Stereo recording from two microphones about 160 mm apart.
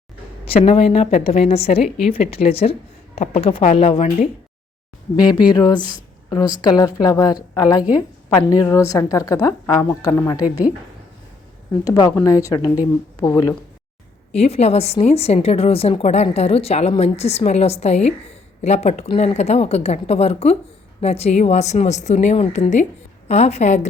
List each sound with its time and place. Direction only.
0.4 s speech: 40° left (ahead or behind)
5.1 s a woman's voice: 25° left (ahead or behind)
11.9 s a woman's voice: 25° left (ahead or behind)
14.3 s a woman's voice: 40° left (ahead or behind)